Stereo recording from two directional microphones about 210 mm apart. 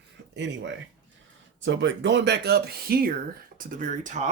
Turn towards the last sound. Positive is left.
turn(degrees=-35)  # may be behind; listen again after turning